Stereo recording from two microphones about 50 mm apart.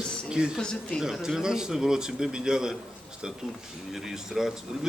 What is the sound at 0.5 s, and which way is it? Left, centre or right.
Speech, centre.